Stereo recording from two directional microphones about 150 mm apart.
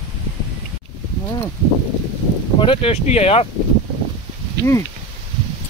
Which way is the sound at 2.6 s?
40° left (ahead or behind).